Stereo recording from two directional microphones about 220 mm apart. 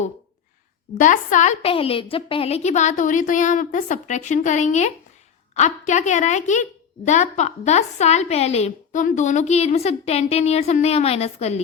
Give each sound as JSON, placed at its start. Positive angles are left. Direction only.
{"t": 0.9, "sound": "a woman's voice", "side_deg": 35}